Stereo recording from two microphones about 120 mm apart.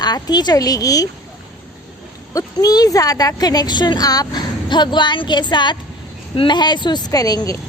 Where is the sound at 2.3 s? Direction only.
30° left (ahead or behind).